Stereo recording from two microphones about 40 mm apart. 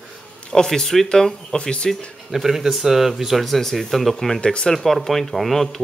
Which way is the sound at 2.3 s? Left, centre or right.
Centre.